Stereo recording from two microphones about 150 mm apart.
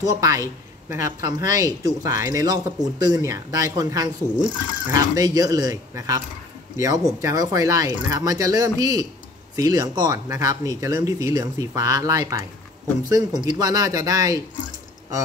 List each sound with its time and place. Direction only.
0.1 s speech: 25° right (ahead or behind)